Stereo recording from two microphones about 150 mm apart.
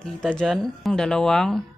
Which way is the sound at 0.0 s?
5° left (ahead or behind).